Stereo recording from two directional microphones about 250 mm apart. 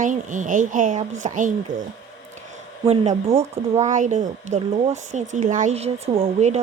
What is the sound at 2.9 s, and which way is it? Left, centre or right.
A woman's voice, right.